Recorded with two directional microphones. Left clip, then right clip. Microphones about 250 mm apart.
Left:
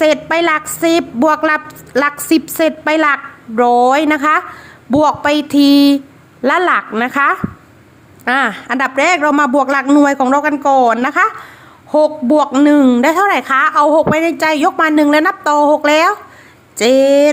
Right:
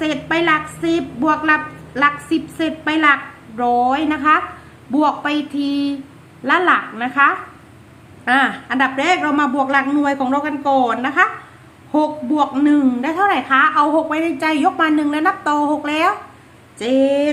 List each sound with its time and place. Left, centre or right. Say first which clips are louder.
0.0 s a woman's voice: left 6 dB; left